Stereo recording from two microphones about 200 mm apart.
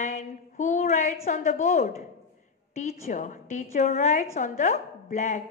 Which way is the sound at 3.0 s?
40° left (ahead or behind).